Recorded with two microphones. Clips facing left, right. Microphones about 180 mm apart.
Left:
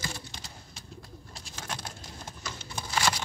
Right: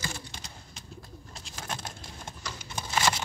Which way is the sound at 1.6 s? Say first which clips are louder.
Right 1 dB; 25° right (ahead or behind).